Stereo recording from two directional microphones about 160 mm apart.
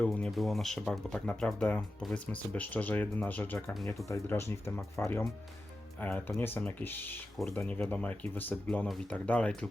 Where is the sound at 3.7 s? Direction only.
Centre (ahead or behind).